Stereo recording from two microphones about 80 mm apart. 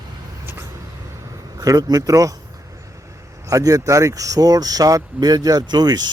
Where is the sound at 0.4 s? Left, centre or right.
Right.